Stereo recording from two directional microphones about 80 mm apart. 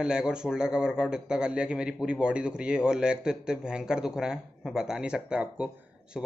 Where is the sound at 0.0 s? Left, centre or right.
Centre.